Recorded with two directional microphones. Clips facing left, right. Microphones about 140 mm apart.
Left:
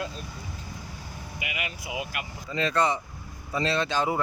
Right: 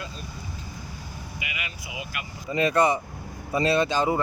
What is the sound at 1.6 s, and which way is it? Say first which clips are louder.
Speech: left 7 dB; 60° left (ahead or behind).